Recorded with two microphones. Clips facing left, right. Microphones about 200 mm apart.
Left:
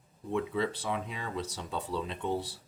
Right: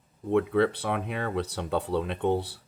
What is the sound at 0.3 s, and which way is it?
Speech, 60° right (ahead or behind).